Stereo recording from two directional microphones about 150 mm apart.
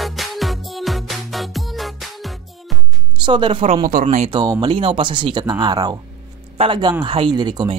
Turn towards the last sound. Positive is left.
turn(degrees=-25)  # may be behind; listen again after turning